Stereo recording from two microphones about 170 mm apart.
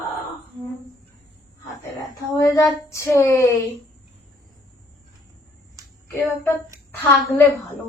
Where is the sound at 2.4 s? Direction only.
20° left (ahead or behind).